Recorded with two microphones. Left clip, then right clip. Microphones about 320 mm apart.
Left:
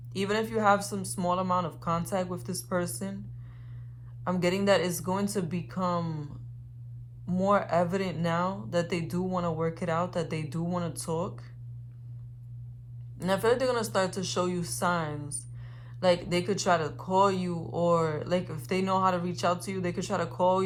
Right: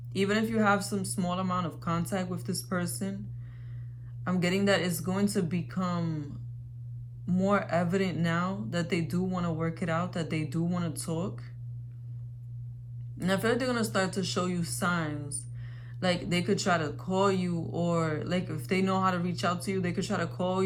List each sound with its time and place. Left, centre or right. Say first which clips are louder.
0.5 s speech: left 2 dB; centre
4.2 s speech: left 1 dB; centre
13.2 s speech: left 3 dB; centre